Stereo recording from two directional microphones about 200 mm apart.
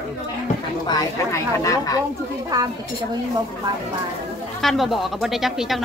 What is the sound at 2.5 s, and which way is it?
Speech, 20° right (ahead or behind).